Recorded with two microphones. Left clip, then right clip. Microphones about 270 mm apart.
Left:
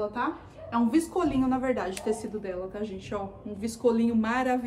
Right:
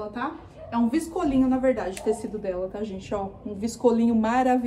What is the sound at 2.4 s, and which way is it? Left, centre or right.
A woman's voice, centre.